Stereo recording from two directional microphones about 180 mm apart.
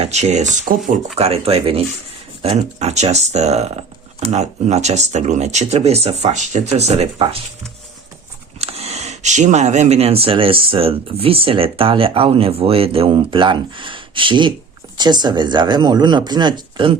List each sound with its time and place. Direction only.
0.0 s speech: 40° right (ahead or behind)
8.6 s speech: 35° right (ahead or behind)